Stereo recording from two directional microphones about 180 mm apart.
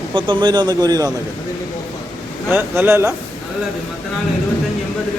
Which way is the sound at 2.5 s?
10° right (ahead or behind).